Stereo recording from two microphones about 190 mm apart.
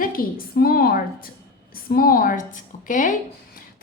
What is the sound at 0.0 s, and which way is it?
A woman's voice, 50° left (ahead or behind).